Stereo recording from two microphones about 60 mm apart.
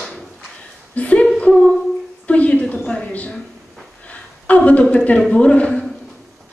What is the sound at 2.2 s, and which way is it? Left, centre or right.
Speech, left.